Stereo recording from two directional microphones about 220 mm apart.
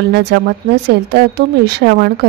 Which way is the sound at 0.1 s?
50° right (ahead or behind).